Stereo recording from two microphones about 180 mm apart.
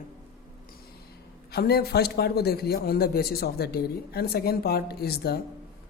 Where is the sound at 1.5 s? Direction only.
60° left (ahead or behind).